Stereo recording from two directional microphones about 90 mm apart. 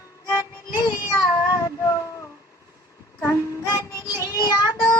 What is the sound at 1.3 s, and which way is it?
Child singing, 45° left (ahead or behind).